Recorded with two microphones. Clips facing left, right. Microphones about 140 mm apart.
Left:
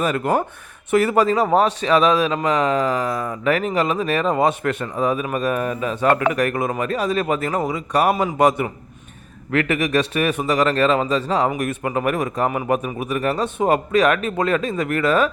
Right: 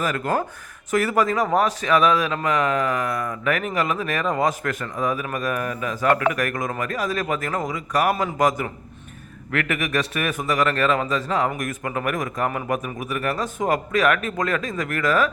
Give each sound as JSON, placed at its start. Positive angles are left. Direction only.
{"t": 0.0, "sound": "a man's voice", "side_deg": 25}